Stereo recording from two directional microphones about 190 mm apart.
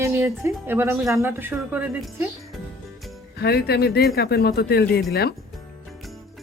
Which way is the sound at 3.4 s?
55° left (ahead or behind).